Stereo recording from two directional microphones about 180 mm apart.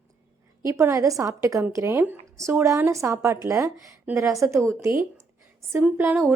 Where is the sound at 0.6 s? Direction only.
15° right (ahead or behind).